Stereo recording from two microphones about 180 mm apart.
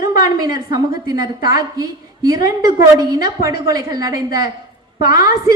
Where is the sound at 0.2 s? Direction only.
20° right (ahead or behind).